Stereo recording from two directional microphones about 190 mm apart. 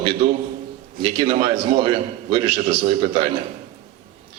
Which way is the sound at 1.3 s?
40° right (ahead or behind).